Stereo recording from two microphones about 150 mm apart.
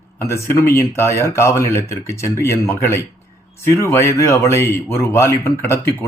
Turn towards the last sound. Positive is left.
turn(degrees=15)  # may be behind; listen again after turning